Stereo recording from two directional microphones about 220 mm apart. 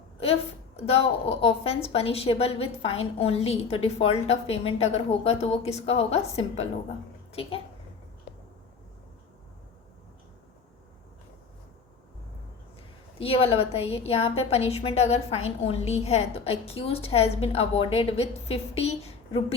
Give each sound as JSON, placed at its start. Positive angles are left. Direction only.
{"t": 0.8, "sound": "a woman's voice", "side_deg": 30}
{"t": 13.1, "sound": "a woman's voice", "side_deg": 25}